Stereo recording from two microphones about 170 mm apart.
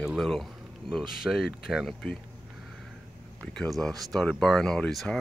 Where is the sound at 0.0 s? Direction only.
Centre (ahead or behind).